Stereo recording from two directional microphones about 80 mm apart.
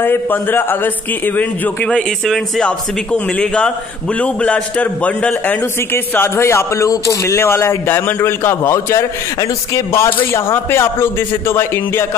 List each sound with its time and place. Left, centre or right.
0.0 s speech: left
1.9 s a man's voice: centre
6.1 s a man's voice: left
10.3 s speech: left